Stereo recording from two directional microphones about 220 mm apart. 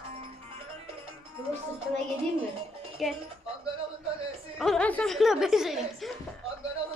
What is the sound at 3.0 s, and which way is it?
Speech, centre (ahead or behind).